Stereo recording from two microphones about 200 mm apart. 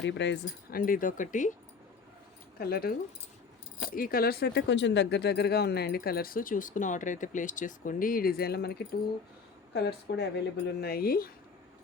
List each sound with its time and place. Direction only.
0.0 s speech: 60° left (ahead or behind)
0.8 s speech: 45° left (ahead or behind)
2.6 s speech: 50° left (ahead or behind)